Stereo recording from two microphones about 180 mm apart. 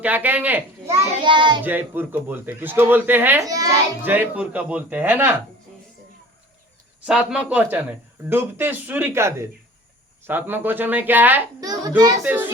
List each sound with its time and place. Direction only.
0.0 s a child's voice: 10° right (ahead or behind)
1.2 s a child's voice: 25° right (ahead or behind)
1.6 s speech: 10° right (ahead or behind)
7.0 s speech: 5° right (ahead or behind)
11.6 s a child's voice: 20° right (ahead or behind)
12.2 s speech: 10° right (ahead or behind)